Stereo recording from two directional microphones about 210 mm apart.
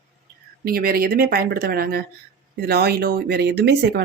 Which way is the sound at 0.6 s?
45° right (ahead or behind).